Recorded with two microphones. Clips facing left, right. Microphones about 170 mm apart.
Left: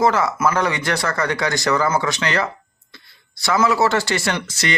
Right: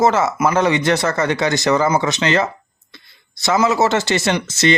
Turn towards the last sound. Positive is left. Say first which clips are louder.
# right 6 dB
turn(degrees=-25)  # may be behind; listen again after turning